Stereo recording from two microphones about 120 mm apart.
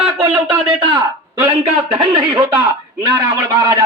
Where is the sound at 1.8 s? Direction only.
45° right (ahead or behind).